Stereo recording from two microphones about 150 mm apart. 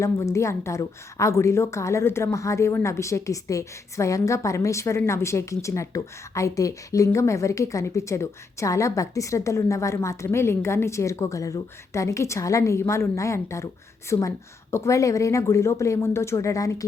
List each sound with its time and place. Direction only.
0.0 s a woman's voice: 20° left (ahead or behind)